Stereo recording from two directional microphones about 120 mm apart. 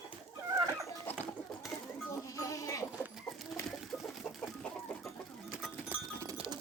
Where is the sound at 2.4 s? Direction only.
25° left (ahead or behind).